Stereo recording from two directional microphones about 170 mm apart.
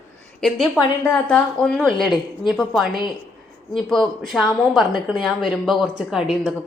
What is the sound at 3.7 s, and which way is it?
Speech, 5° left (ahead or behind).